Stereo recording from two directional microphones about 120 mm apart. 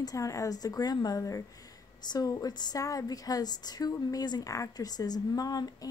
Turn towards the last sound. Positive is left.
turn(degrees=30)  # may be behind; listen again after turning